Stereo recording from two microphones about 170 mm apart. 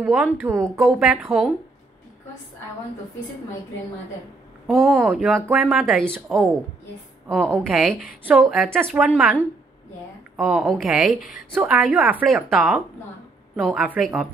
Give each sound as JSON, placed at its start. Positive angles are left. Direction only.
{"t": 0.0, "sound": "a woman's voice", "side_deg": -5}
{"t": 0.4, "sound": "speech", "side_deg": -15}
{"t": 0.7, "sound": "a woman's voice", "side_deg": 0}
{"t": 4.6, "sound": "a woman's voice", "side_deg": 0}